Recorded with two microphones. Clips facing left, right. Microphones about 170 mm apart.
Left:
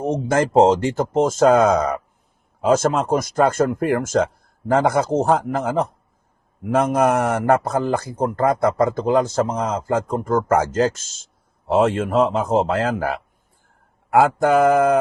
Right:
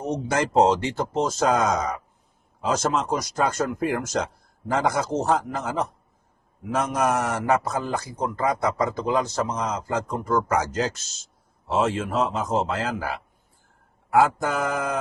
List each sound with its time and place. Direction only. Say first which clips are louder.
0.0 s a man's voice: left 5 dB; 50° left (ahead or behind)